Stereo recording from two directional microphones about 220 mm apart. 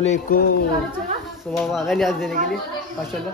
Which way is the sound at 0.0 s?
35° left (ahead or behind).